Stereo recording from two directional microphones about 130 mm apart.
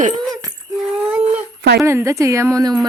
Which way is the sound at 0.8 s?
5° right (ahead or behind).